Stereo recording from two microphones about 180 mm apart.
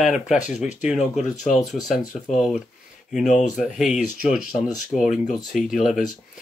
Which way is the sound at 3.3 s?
40° left (ahead or behind).